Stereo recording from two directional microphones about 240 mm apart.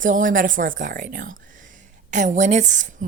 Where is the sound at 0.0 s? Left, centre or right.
Right.